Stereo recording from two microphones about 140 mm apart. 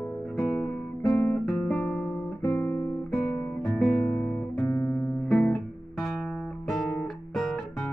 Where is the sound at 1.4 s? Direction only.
5° left (ahead or behind).